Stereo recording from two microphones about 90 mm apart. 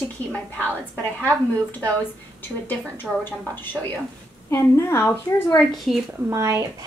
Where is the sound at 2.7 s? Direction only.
20° left (ahead or behind).